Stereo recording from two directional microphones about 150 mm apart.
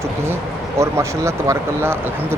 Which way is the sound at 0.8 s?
20° right (ahead or behind).